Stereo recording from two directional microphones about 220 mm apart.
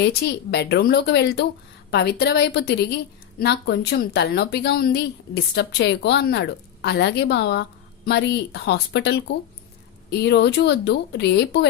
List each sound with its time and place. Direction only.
0.0 s a woman's voice: 45° left (ahead or behind)